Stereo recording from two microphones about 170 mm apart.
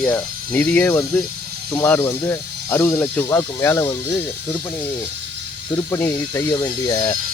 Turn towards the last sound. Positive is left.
turn(degrees=25)  # may be behind; listen again after turning